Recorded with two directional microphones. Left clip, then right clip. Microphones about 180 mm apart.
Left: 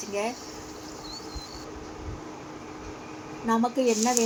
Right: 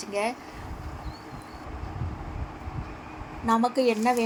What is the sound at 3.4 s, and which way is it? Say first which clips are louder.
Speech: right 1 dB; 25° right (ahead or behind).